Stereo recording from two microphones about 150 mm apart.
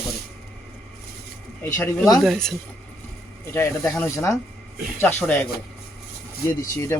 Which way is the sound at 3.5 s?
15° left (ahead or behind).